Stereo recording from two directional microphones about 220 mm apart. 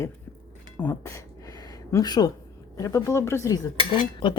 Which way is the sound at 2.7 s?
15° left (ahead or behind).